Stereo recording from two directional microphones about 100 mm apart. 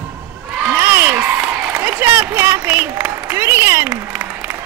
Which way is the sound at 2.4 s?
25° right (ahead or behind).